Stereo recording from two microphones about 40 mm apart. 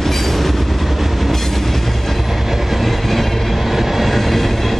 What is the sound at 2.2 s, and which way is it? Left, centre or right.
Train, centre.